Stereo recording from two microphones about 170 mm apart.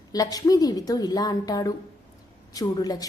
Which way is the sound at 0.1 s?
20° left (ahead or behind).